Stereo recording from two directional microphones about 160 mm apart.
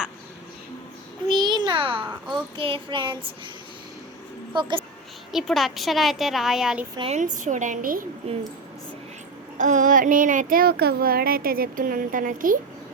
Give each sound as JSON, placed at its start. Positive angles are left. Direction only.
{"t": 1.3, "sound": "a sound", "side_deg": -25}
{"t": 2.2, "sound": "speech", "side_deg": -30}
{"t": 5.3, "sound": "a woman's voice", "side_deg": 0}
{"t": 7.1, "sound": "a woman's voice", "side_deg": -50}
{"t": 9.6, "sound": "speech", "side_deg": -50}